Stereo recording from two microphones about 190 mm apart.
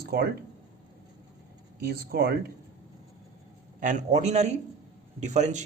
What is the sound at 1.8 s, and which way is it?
Speech, 55° right (ahead or behind).